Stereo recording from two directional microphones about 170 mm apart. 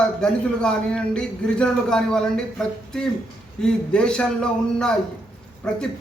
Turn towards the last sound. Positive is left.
turn(degrees=5)  # may be behind; listen again after turning